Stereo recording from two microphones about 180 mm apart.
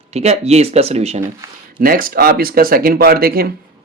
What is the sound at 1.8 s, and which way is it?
Speech, 55° right (ahead or behind).